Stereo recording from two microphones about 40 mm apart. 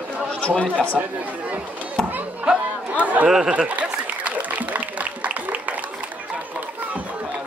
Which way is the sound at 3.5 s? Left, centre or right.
Right.